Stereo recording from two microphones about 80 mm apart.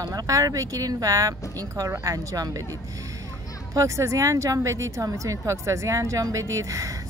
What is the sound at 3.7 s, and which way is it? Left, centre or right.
A woman's voice, right.